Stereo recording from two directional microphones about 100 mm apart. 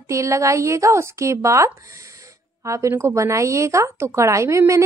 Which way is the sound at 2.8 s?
30° right (ahead or behind).